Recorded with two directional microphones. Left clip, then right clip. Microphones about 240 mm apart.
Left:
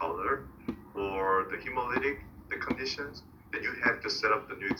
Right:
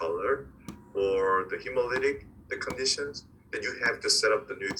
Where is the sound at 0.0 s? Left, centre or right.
Right.